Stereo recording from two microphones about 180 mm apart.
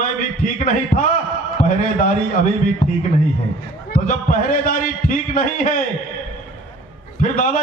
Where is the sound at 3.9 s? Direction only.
50° left (ahead or behind).